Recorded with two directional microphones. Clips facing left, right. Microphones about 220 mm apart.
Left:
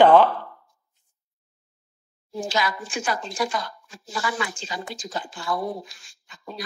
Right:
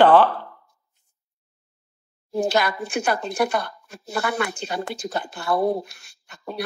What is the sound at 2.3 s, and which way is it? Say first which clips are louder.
A woman's voice: right 5 dB; 60° right (ahead or behind).